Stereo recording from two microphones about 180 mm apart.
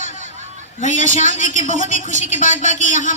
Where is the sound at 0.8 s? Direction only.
45° left (ahead or behind).